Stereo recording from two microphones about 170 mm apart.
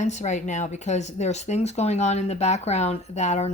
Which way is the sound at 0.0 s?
45° left (ahead or behind).